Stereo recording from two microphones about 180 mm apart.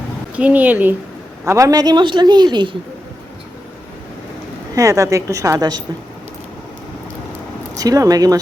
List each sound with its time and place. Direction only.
0.3 s a woman's voice: 10° right (ahead or behind); by 2.7 s 25° right (ahead or behind)
4.7 s a woman's voice: 20° right (ahead or behind)
7.8 s a woman's voice: 20° right (ahead or behind)